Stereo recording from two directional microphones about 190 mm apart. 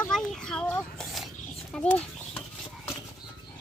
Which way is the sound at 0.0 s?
5° left (ahead or behind).